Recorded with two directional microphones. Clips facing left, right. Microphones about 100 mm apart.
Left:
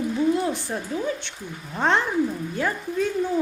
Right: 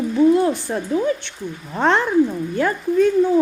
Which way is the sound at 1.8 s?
80° right.